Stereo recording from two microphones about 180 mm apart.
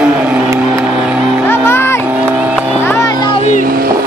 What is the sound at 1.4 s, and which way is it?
Music, 15° left (ahead or behind).